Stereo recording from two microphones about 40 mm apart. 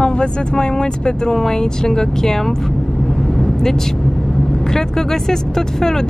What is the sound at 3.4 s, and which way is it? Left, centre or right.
Vehicle, centre.